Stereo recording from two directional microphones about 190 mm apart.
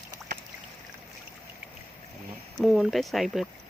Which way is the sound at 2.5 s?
Centre (ahead or behind).